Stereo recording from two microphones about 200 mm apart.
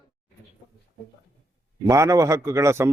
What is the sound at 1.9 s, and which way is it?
A man's voice, 15° right (ahead or behind).